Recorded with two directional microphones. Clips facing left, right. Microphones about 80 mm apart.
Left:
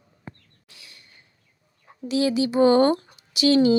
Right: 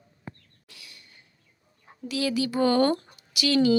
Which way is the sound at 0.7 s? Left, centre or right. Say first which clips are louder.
Even; left.